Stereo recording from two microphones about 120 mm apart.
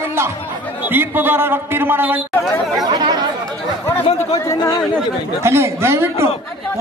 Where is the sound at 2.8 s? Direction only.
35° right (ahead or behind).